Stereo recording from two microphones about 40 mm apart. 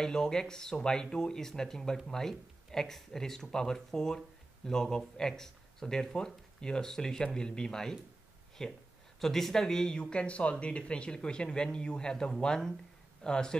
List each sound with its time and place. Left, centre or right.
0.0 s speech: centre